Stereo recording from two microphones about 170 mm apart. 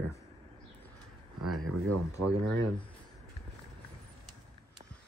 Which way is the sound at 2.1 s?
20° left (ahead or behind).